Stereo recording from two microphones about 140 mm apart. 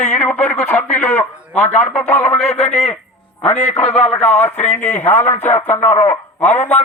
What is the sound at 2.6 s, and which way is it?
A man's voice, 50° left (ahead or behind).